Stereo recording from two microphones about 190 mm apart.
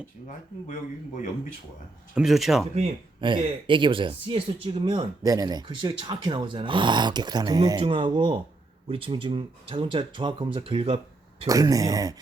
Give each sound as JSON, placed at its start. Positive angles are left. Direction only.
{"t": 0.3, "sound": "speech", "side_deg": 40}
{"t": 2.1, "sound": "speech", "side_deg": 0}
{"t": 2.7, "sound": "speech", "side_deg": -30}
{"t": 11.4, "sound": "speech", "side_deg": -20}